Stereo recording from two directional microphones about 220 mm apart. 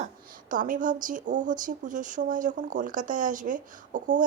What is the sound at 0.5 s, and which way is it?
Speech, 35° right (ahead or behind).